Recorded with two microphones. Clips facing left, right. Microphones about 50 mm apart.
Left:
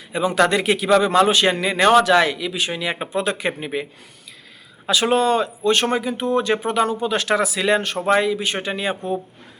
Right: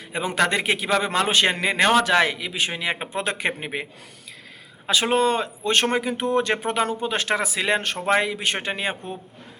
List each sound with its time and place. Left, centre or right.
0.1 s a man's voice: right
0.3 s a man's voice: right
5.0 s speech: right
7.0 s a man's voice: right